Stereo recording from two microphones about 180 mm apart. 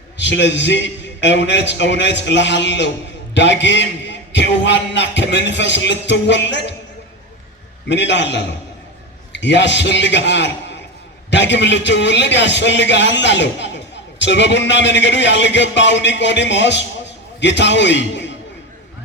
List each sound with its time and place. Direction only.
0.2 s a man's voice: 80° left
7.9 s a man's voice: 80° left